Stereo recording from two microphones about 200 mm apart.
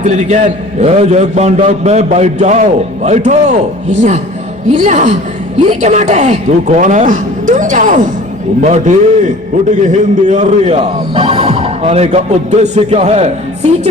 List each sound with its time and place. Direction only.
0.0 s a man's voice: 35° right (ahead or behind)